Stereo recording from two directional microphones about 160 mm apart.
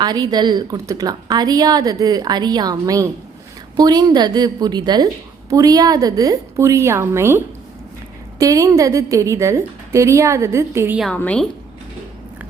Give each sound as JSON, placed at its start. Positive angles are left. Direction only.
{"t": 0.0, "sound": "a woman's voice", "side_deg": -25}
{"t": 11.0, "sound": "a woman's voice", "side_deg": 10}